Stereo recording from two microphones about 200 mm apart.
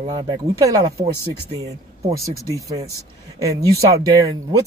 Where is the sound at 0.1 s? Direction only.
20° right (ahead or behind).